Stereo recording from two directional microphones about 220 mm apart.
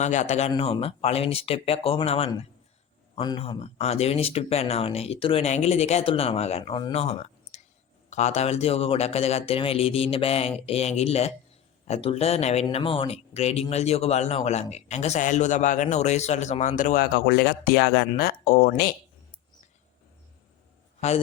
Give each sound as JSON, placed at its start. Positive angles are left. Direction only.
{"t": 0.0, "sound": "speech", "side_deg": 30}